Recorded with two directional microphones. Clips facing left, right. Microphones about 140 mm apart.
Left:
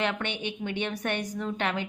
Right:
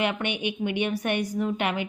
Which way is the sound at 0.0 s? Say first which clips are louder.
Right 3 dB; 10° right (ahead or behind).